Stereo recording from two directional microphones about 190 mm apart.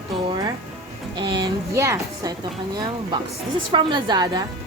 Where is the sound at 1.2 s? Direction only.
25° right (ahead or behind).